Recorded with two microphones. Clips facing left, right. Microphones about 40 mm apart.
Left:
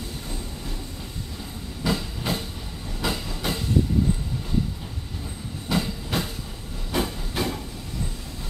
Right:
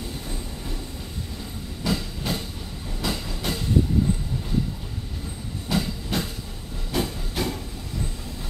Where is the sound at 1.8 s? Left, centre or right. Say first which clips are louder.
Left 1 dB; centre.